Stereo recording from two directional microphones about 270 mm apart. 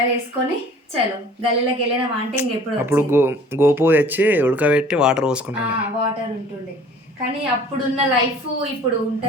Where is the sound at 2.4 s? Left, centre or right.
Centre.